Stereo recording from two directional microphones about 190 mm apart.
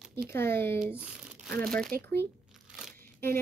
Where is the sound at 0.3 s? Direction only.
10° left (ahead or behind).